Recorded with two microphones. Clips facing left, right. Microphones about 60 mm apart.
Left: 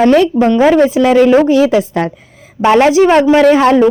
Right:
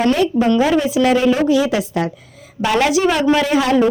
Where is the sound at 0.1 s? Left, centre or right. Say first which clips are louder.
Left 6 dB; left.